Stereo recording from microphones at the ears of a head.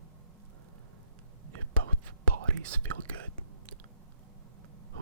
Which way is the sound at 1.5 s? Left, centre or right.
Right.